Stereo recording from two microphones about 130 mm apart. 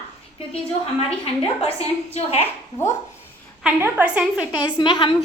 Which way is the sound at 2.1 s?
55° left (ahead or behind).